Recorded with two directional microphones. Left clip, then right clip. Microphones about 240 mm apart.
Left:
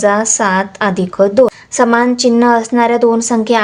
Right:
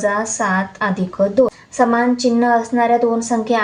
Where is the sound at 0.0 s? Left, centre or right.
Left.